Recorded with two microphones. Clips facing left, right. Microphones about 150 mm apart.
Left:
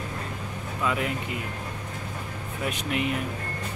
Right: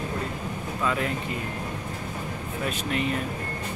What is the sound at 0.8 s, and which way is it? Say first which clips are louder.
Speech: even; 15° left (ahead or behind).